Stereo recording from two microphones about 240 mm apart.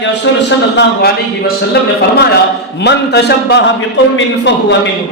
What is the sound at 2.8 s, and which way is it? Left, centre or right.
A man's voice, left.